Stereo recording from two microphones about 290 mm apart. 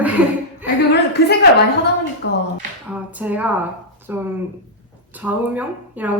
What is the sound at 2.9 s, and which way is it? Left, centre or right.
A woman's voice, centre.